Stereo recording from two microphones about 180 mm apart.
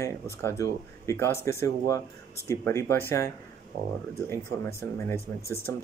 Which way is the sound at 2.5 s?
15° left (ahead or behind).